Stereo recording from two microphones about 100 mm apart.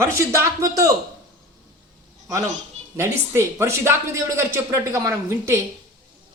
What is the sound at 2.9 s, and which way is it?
A man's voice, 25° right (ahead or behind).